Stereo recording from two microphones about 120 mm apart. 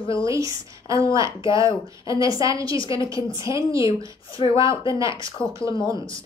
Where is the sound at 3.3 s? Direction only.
25° right (ahead or behind).